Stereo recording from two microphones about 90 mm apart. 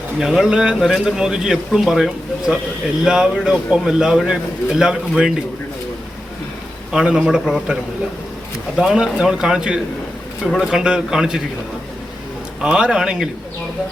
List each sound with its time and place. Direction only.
0.2 s a man's voice: 5° right (ahead or behind)
6.9 s a man's voice: 5° right (ahead or behind)
8.8 s a man's voice: 5° right (ahead or behind)
12.6 s a man's voice: 10° right (ahead or behind)